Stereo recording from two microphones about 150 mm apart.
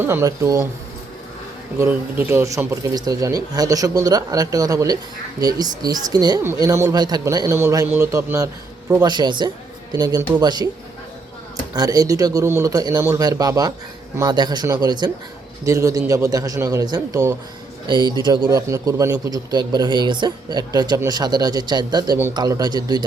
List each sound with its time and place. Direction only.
0.0 s a man's voice: 15° right (ahead or behind)
1.8 s a man's voice: 15° right (ahead or behind)
11.7 s a man's voice: 25° right (ahead or behind)
17.8 s a man's voice: 30° right (ahead or behind)